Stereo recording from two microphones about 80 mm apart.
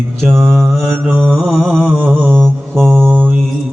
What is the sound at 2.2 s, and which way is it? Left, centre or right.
Mantra, centre.